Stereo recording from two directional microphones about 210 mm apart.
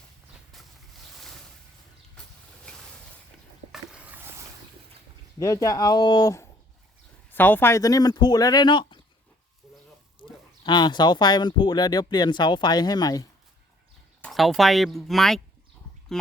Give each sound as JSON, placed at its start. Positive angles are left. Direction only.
{"t": 3.7, "sound": "a sound", "side_deg": -5}
{"t": 5.4, "sound": "speech", "side_deg": 15}
{"t": 10.2, "sound": "speech", "side_deg": 20}
{"t": 14.2, "sound": "speech", "side_deg": 0}